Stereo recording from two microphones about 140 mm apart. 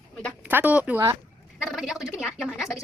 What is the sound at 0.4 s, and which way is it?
Speech, 10° right (ahead or behind).